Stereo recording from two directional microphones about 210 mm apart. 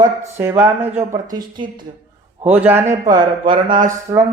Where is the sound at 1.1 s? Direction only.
20° right (ahead or behind).